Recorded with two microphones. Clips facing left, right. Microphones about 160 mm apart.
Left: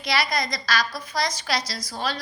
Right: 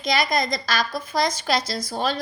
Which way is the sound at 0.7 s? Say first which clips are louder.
Even; 50° right (ahead or behind).